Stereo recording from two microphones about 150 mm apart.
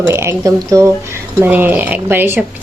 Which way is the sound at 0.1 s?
20° right (ahead or behind).